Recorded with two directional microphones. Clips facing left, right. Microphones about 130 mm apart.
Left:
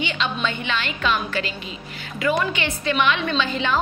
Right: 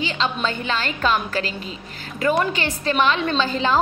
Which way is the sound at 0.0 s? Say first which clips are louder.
Right 1 dB; 35° right (ahead or behind).